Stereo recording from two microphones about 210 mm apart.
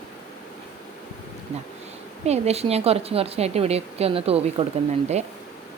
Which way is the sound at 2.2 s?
30° right (ahead or behind).